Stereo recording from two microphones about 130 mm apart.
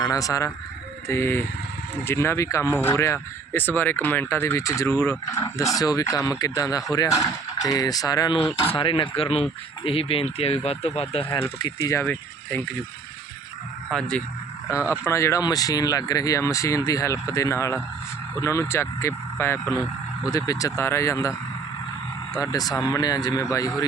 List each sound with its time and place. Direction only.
0.0 s speech: 25° left (ahead or behind)
8.6 s speech: 45° left (ahead or behind)
11.6 s speech: 25° left (ahead or behind)
13.9 s speech: 5° left (ahead or behind)
14.8 s speech: 20° left (ahead or behind)
22.4 s speech: 30° left (ahead or behind)